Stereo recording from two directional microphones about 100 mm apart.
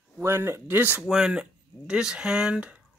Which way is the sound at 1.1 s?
5° right (ahead or behind).